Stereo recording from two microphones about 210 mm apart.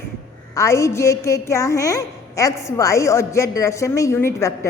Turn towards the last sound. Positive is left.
turn(degrees=15)  # may be behind; listen again after turning